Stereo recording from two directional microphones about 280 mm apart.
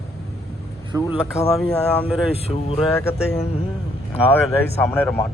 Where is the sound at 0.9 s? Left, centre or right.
Centre.